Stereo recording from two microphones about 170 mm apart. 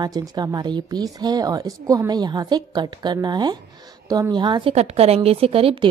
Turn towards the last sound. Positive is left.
turn(degrees=-35)  # may be behind; listen again after turning